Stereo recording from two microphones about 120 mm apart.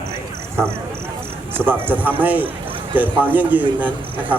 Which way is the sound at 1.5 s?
15° right (ahead or behind).